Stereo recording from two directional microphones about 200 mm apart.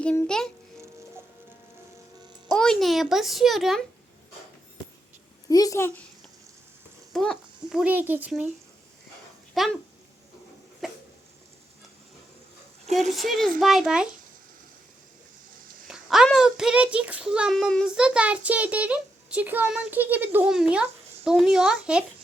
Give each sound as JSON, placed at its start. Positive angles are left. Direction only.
{"t": 0.0, "sound": "a child's voice", "side_deg": 5}
{"t": 2.6, "sound": "a child's voice", "side_deg": 0}
{"t": 5.5, "sound": "a woman's voice", "side_deg": 15}
{"t": 7.1, "sound": "a child's voice", "side_deg": 0}
{"t": 9.6, "sound": "a child's voice", "side_deg": 0}
{"t": 10.8, "sound": "a sound", "side_deg": 0}
{"t": 12.8, "sound": "dog", "side_deg": -35}
{"t": 13.1, "sound": "a child's voice", "side_deg": 0}
{"t": 15.9, "sound": "a child's voice", "side_deg": 0}